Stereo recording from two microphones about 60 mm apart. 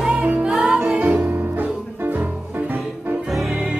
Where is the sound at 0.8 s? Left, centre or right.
Right.